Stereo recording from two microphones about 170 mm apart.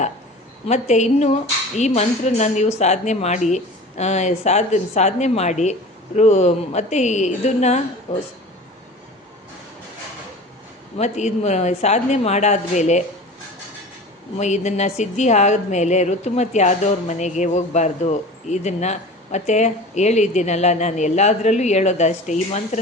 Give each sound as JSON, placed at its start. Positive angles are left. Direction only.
{"t": 0.7, "sound": "a woman's voice", "side_deg": 45}
{"t": 10.9, "sound": "a woman's voice", "side_deg": 40}
{"t": 14.3, "sound": "a woman's voice", "side_deg": 45}